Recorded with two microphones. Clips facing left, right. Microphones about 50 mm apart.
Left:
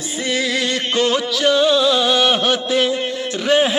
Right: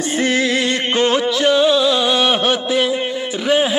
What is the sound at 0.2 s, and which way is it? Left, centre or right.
Music, right.